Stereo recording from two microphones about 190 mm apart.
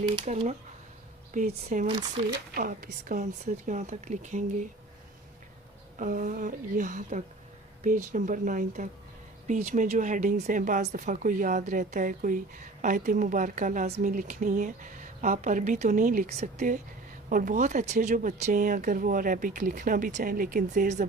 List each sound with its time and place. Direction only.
0.2 s speech: 35° right (ahead or behind)
6.0 s speech: 45° right (ahead or behind)